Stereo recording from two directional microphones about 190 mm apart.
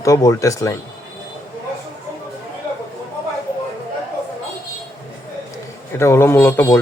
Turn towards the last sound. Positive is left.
turn(degrees=15)  # may be behind; listen again after turning